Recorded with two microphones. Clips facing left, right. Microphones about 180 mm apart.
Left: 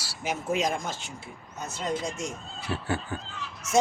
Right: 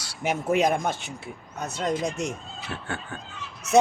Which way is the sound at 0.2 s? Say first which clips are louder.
Right 5 dB; 60° right (ahead or behind).